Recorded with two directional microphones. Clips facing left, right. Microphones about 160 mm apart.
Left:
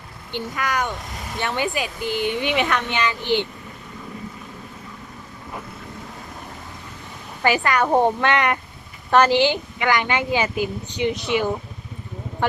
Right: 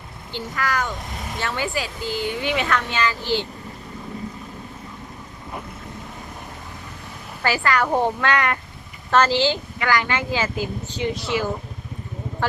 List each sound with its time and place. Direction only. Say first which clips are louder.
0.3 s speech: left 1 dB; 20° left (ahead or behind)
7.4 s a woman's voice: left 2 dB; 20° left (ahead or behind)